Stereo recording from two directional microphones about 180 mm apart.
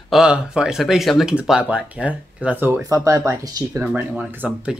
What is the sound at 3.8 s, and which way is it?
Speech, 5° right (ahead or behind).